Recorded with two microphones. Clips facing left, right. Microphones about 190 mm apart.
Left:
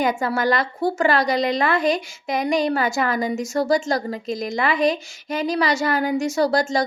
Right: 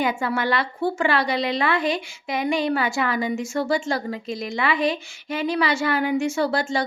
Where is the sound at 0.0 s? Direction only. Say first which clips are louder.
Left 2 dB; 40° left (ahead or behind).